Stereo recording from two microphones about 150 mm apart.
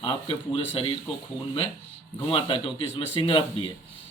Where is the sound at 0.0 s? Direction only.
35° left (ahead or behind).